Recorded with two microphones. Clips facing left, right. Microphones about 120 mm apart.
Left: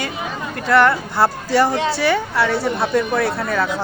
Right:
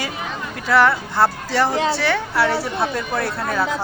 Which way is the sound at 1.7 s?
30° right (ahead or behind).